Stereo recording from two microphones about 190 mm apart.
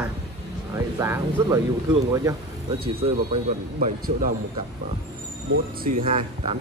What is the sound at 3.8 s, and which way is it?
Speech, 45° right (ahead or behind).